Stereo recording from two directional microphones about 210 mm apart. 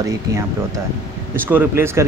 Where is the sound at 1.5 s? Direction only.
10° right (ahead or behind).